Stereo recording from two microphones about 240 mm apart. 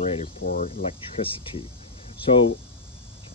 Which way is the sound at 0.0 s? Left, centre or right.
Left.